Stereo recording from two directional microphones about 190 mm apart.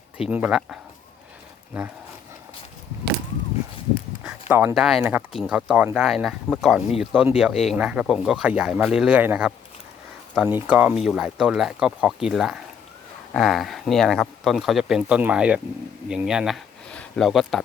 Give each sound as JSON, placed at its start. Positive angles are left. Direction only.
{"t": 0.3, "sound": "speech", "side_deg": -5}
{"t": 4.2, "sound": "a sound", "side_deg": -5}
{"t": 4.7, "sound": "speech", "side_deg": 0}